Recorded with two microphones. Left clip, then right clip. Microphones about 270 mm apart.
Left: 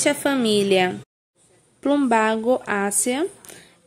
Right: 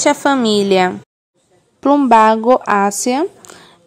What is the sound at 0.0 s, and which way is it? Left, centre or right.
A woman's voice, centre.